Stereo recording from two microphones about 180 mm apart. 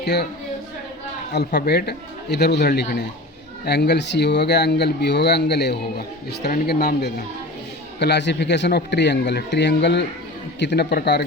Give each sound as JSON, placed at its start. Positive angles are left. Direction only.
{"t": 0.0, "sound": "a woman's voice", "side_deg": 65}
{"t": 1.5, "sound": "speech", "side_deg": 65}